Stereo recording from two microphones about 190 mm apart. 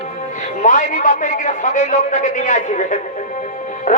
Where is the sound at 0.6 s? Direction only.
40° left (ahead or behind).